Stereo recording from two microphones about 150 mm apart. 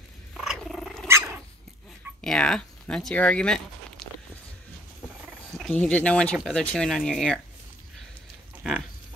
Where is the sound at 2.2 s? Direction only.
5° left (ahead or behind).